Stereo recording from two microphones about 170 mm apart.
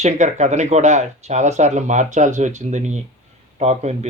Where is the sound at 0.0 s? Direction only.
45° right (ahead or behind).